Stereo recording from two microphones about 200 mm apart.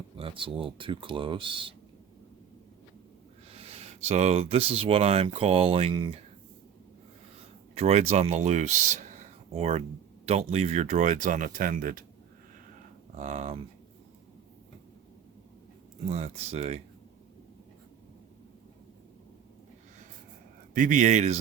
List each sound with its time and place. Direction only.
0.2 s speech: 25° right (ahead or behind)
3.5 s speech: 30° right (ahead or behind)
7.8 s speech: 30° right (ahead or behind)
13.1 s speech: 35° right (ahead or behind)
16.0 s speech: 35° right (ahead or behind)
20.7 s speech: 40° right (ahead or behind)